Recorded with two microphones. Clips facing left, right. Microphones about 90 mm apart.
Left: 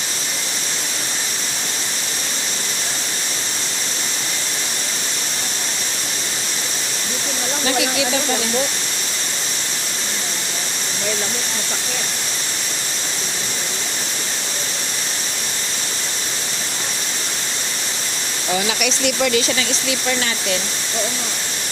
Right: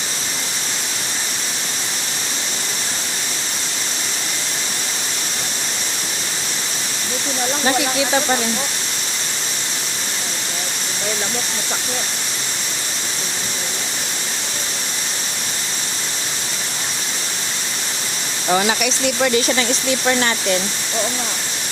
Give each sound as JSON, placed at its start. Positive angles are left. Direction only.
{"t": 18.5, "sound": "speech", "side_deg": -55}
{"t": 18.8, "sound": "speech", "side_deg": -30}
{"t": 20.1, "sound": "speech", "side_deg": -45}